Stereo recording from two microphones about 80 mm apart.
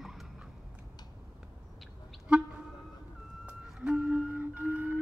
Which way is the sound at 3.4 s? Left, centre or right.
Centre.